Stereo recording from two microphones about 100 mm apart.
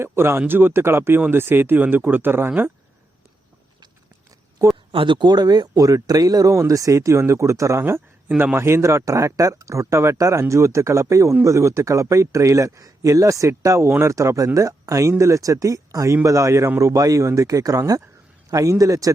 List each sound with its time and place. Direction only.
0.0 s speech: 25° right (ahead or behind)
4.9 s speech: 60° right (ahead or behind); by 19.1 s 35° right (ahead or behind)